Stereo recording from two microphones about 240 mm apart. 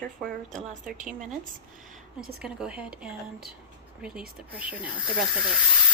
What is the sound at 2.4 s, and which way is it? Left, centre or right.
A woman's voice, centre.